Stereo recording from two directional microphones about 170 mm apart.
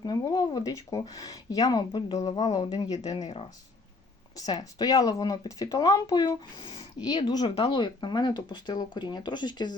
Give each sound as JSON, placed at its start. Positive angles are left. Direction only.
{"t": 0.0, "sound": "speech", "side_deg": 25}
{"t": 4.4, "sound": "speech", "side_deg": 20}